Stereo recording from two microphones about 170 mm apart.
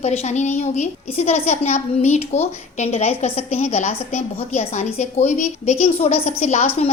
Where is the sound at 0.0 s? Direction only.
40° left (ahead or behind).